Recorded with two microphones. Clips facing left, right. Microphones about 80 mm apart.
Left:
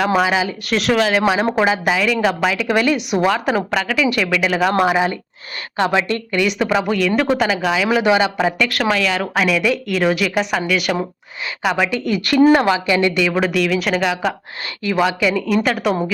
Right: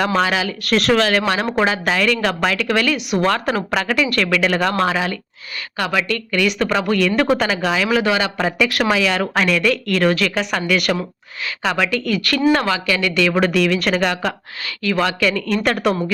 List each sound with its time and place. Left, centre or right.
0.0 s a woman's voice: centre
0.7 s a woman's voice: centre
4.8 s a woman's voice: centre
6.4 s a woman's voice: centre
8.5 s speech: centre
11.8 s a woman's voice: centre
13.3 s a woman's voice: centre